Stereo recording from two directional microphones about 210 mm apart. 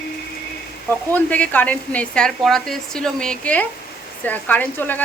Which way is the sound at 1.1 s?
5° left (ahead or behind).